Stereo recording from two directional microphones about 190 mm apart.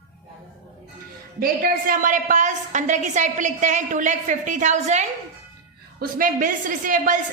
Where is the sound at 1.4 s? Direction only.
45° right (ahead or behind).